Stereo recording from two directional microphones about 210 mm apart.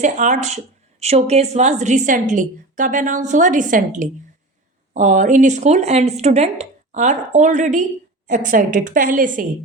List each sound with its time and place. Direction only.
0.0 s speech: 35° right (ahead or behind)